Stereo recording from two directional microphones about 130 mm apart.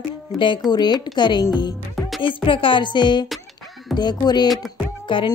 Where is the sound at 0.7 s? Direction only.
35° left (ahead or behind).